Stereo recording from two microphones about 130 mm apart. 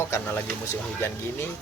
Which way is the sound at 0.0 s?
15° left (ahead or behind).